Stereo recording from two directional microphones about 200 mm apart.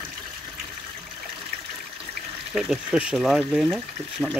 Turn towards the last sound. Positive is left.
turn(degrees=0)  # may be behind; listen again after turning